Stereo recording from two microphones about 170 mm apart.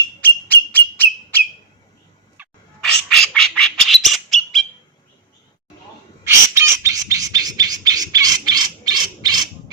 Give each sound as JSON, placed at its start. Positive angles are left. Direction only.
{"t": 0.2, "sound": "a sound", "side_deg": 10}
{"t": 2.8, "sound": "squawk", "side_deg": 5}
{"t": 6.2, "sound": "bird", "side_deg": -15}